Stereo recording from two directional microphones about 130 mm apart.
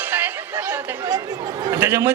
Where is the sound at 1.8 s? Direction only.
15° right (ahead or behind).